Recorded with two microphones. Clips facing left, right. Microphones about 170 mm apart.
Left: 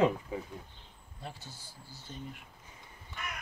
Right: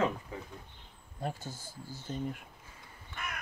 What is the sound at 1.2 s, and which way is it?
Speech, 45° right (ahead or behind).